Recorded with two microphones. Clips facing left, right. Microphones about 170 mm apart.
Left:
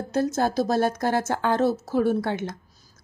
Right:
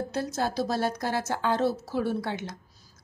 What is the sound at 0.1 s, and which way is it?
A woman's voice, 45° left (ahead or behind).